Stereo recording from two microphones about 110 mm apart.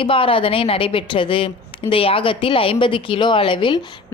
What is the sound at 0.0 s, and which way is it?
A woman's voice, 55° left (ahead or behind).